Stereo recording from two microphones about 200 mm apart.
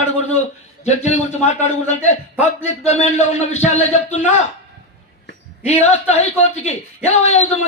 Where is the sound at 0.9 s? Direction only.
35° left (ahead or behind).